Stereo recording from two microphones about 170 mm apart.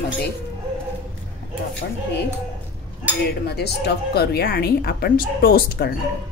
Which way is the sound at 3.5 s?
70° left (ahead or behind).